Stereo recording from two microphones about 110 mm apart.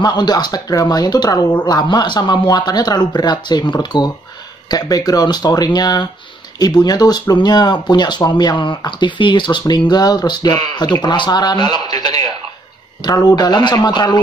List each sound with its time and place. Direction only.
0.0 s speech: 40° left (ahead or behind)